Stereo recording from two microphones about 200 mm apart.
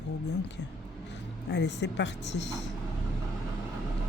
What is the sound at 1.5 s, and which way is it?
A woman's voice, 60° left (ahead or behind).